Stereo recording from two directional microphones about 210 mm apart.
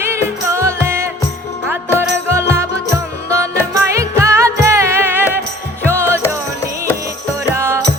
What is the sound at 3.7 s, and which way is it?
Music, 15° right (ahead or behind).